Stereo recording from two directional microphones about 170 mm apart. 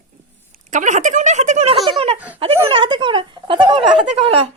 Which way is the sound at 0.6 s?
45° right (ahead or behind).